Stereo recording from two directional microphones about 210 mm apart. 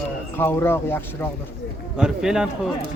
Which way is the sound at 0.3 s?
10° left (ahead or behind).